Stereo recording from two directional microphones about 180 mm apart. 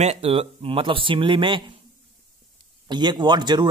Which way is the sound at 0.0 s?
35° right (ahead or behind).